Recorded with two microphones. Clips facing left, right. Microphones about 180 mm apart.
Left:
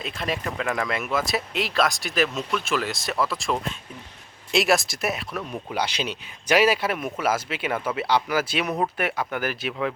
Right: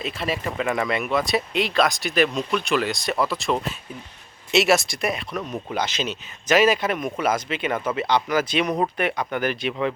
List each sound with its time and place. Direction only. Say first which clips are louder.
0.0 s speech: right 2 dB; centre (ahead or behind)